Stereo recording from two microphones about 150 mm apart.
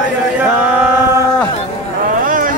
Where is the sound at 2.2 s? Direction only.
65° right (ahead or behind).